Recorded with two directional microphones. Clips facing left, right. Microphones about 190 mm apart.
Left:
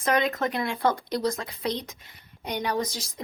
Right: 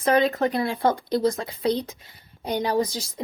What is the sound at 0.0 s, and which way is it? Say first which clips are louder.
A woman's voice: right 4 dB; 30° right (ahead or behind).